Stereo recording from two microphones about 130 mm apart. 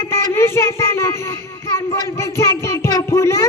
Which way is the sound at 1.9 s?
25° left (ahead or behind).